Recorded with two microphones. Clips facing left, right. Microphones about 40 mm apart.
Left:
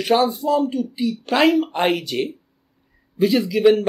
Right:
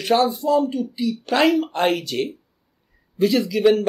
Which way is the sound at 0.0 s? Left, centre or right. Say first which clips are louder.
Left 1 dB; centre.